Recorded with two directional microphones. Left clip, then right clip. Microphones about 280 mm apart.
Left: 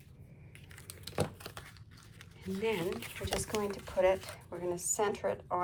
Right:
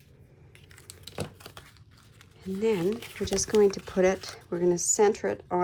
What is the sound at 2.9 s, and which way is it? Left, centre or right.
Speech, centre.